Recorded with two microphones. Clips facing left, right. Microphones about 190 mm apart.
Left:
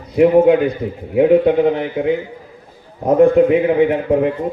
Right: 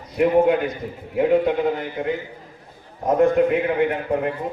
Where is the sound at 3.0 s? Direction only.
55° left (ahead or behind).